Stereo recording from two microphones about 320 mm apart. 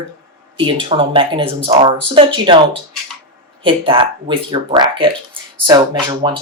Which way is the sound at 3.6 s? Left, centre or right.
Centre.